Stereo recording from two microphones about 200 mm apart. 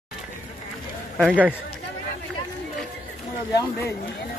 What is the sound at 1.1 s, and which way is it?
Speech, 5° right (ahead or behind).